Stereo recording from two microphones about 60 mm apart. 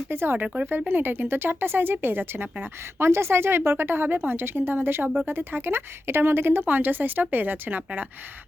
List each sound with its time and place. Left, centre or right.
0.1 s speech: right